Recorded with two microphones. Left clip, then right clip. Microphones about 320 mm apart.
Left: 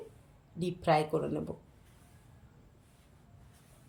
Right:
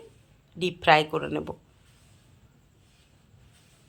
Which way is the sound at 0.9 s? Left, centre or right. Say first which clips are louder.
Right 8 dB; centre.